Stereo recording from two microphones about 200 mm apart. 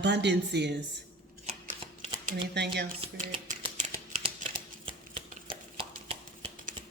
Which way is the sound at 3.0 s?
30° right (ahead or behind).